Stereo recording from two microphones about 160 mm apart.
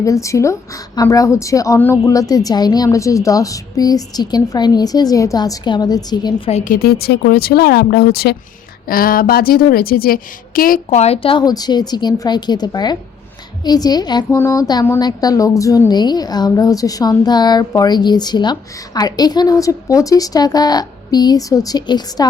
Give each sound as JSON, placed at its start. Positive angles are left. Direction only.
{"t": 0.0, "sound": "a woman's voice", "side_deg": 20}
{"t": 6.5, "sound": "speech", "side_deg": 60}
{"t": 8.9, "sound": "a woman's voice", "side_deg": 65}